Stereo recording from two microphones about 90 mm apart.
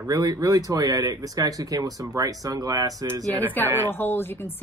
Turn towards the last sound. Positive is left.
turn(degrees=25)  # may be behind; listen again after turning